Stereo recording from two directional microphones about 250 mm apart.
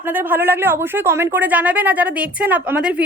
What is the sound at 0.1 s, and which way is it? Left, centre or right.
Speech, centre.